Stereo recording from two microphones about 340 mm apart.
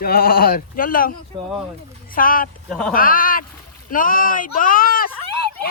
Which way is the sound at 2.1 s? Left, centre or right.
Left.